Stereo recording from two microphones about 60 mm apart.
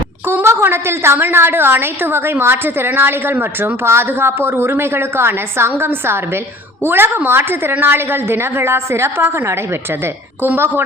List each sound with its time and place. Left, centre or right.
0.4 s a woman's voice: right